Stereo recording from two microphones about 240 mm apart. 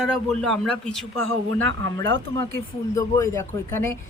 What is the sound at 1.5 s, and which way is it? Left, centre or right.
Speech, right.